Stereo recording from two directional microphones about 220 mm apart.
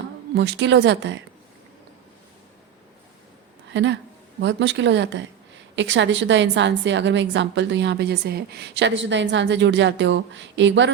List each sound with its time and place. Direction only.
0.3 s speech: 50° right (ahead or behind)
3.7 s a woman's voice: 55° right (ahead or behind)